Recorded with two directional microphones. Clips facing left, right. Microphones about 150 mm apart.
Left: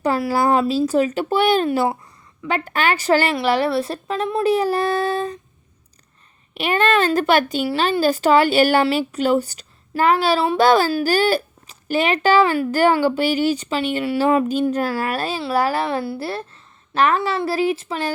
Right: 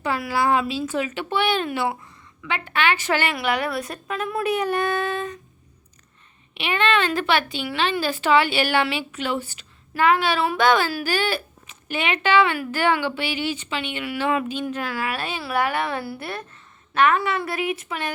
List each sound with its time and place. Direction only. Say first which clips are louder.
0.0 s speech: left 5 dB; 40° left (ahead or behind)
6.5 s speech: left 4 dB; 40° left (ahead or behind)